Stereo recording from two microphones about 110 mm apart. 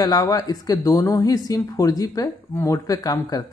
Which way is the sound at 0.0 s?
35° left (ahead or behind).